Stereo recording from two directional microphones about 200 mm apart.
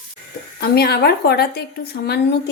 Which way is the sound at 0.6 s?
50° left (ahead or behind).